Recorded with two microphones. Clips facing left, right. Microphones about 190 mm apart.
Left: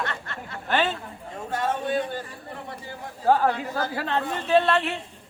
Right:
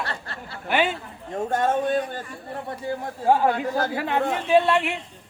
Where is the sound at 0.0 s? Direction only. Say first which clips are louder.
Even; 35° right (ahead or behind).